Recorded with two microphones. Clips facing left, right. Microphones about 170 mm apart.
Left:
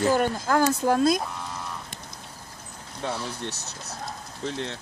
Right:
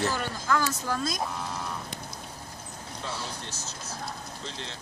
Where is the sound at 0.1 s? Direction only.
50° left (ahead or behind).